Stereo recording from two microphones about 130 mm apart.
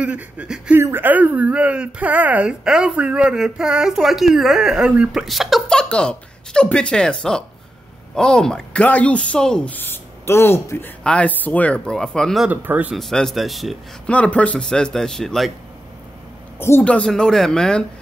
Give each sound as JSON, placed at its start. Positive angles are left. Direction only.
{"t": 0.0, "sound": "speech", "side_deg": -10}
{"t": 12.4, "sound": "speech", "side_deg": -10}
{"t": 12.9, "sound": "speech", "side_deg": 5}
{"t": 16.5, "sound": "a woman's voice", "side_deg": 20}
{"t": 16.8, "sound": "speech", "side_deg": 10}